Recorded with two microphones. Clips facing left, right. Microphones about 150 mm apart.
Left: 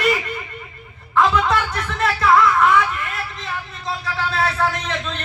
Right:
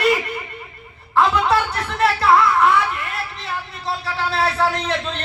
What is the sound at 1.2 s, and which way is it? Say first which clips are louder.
Speech: right 1 dB; 30° right (ahead or behind).